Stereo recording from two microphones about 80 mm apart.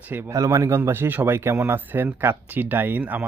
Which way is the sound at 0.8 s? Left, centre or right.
Right.